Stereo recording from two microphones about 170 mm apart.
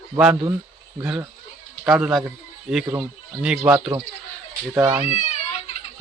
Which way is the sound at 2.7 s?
5° right (ahead or behind).